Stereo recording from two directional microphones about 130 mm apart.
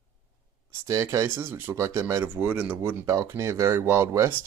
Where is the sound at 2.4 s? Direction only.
10° right (ahead or behind).